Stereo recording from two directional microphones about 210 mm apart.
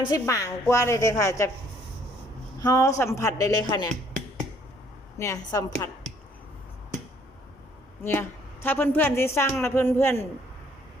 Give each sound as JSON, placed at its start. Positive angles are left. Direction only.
{"t": 0.1, "sound": "a man's voice", "side_deg": 15}
{"t": 2.6, "sound": "a man's voice", "side_deg": 15}
{"t": 5.1, "sound": "a man's voice", "side_deg": 15}
{"t": 8.0, "sound": "a man's voice", "side_deg": 10}